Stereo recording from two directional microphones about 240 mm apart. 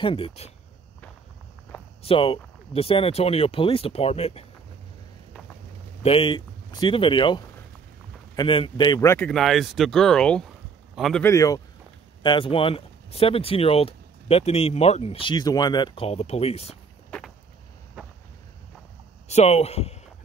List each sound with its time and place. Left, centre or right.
0.0 s speech: left
2.0 s speech: left
6.0 s speech: left
17.1 s a sound: centre
19.2 s speech: left